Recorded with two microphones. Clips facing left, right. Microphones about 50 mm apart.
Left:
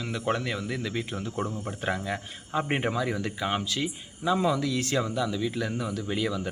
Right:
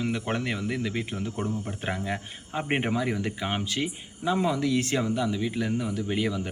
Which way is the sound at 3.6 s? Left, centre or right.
Right.